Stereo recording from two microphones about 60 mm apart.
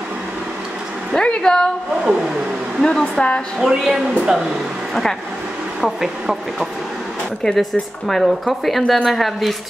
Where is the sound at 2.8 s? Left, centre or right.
Centre.